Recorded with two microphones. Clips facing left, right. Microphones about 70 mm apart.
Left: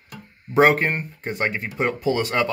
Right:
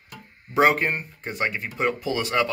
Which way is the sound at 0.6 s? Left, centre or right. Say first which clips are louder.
Left 3 dB; left.